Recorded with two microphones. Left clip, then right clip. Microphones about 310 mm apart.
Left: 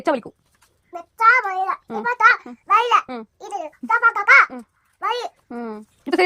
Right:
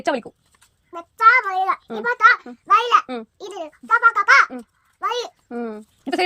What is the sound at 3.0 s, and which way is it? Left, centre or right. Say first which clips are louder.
Speech: right 2 dB; left.